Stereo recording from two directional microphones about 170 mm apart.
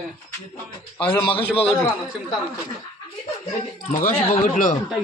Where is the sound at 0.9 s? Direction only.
10° left (ahead or behind).